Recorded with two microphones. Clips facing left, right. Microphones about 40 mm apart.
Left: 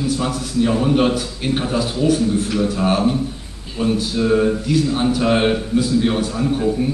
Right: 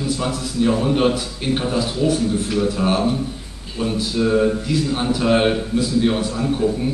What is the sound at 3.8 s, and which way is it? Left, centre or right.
A man's voice, centre.